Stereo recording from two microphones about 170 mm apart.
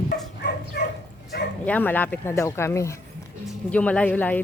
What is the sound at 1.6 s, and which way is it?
Speech, 10° left (ahead or behind).